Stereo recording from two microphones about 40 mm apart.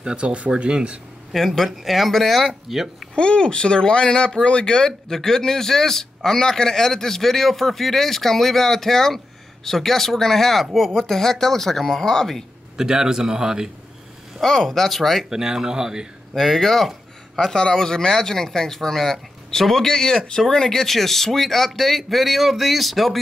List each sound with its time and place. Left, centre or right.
0.0 s speech: right
1.3 s a man's voice: centre
3.2 s a man's voice: left
12.7 s a man's voice: centre
14.4 s a man's voice: centre
15.2 s a man's voice: centre
16.3 s a man's voice: centre
17.6 s a man's voice: centre